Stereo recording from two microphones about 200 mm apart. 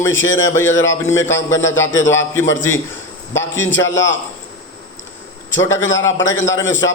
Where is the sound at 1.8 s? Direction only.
70° left (ahead or behind).